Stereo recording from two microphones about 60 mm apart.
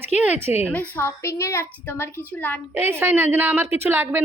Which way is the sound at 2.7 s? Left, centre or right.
Right.